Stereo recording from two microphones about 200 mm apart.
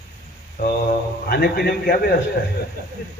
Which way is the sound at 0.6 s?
45° left (ahead or behind).